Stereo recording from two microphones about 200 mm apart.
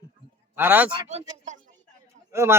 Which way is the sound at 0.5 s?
10° right (ahead or behind).